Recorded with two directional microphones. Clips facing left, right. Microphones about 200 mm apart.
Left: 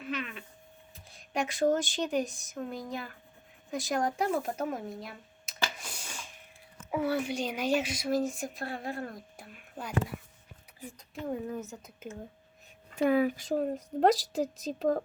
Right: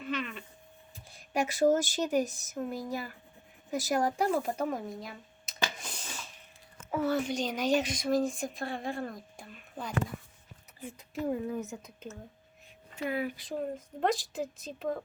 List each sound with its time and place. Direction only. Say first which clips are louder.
0.0 s a sound: right 1 dB; centre (ahead or behind)
0.9 s speech: right 2 dB; 5° right (ahead or behind)
5.7 s a sound: right 1 dB; 10° left (ahead or behind)
6.9 s speech: even; 10° left (ahead or behind)
10.9 s speech: right 3 dB; 5° right (ahead or behind)
13.0 s speech: left 8 dB; 50° left (ahead or behind)